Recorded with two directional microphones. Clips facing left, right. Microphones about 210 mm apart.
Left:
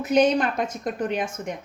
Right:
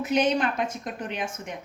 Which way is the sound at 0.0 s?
40° left (ahead or behind).